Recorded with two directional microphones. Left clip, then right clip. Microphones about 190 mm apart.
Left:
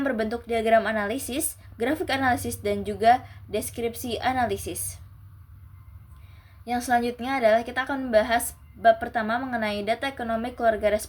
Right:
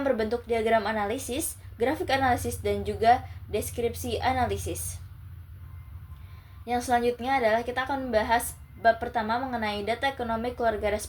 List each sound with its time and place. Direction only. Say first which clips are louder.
0.0 s a woman's voice: right 1 dB; 45° left (ahead or behind)
6.7 s a woman's voice: left 1 dB; 45° left (ahead or behind)